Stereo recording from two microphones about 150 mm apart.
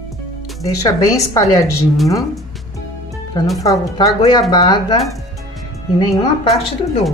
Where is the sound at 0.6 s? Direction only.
20° left (ahead or behind).